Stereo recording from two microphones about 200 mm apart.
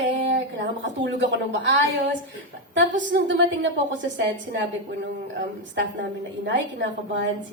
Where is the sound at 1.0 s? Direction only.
60° right (ahead or behind).